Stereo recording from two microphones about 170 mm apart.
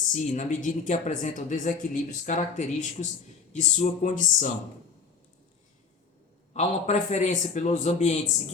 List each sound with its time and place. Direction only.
0.1 s a woman's voice: 45° left (ahead or behind)
6.5 s a woman's voice: 45° left (ahead or behind)